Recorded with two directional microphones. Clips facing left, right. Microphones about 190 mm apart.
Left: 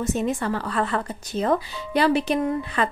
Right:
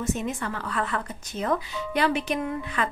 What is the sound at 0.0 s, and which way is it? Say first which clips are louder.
Speech: left 4 dB; 35° left (ahead or behind).